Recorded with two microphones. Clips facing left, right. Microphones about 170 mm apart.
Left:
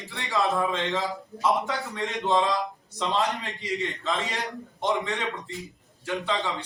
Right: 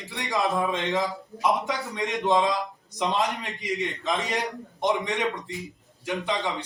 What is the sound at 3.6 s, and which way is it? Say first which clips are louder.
A man's voice: right 3 dB; 15° right (ahead or behind).